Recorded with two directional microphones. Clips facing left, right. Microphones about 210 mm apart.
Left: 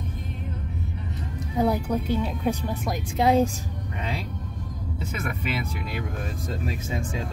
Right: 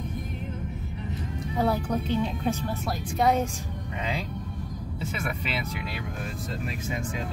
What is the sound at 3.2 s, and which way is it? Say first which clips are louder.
Speech: left 4 dB; 30° left (ahead or behind).